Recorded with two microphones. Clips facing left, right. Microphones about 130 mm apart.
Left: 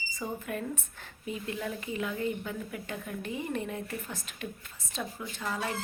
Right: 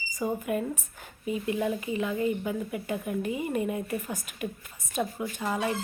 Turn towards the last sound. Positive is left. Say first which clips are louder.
# right 5 dB
turn(degrees=-15)  # may be behind; listen again after turning